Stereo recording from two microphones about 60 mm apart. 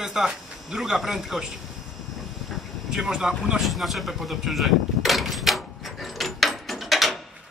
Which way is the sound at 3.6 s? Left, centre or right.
Centre.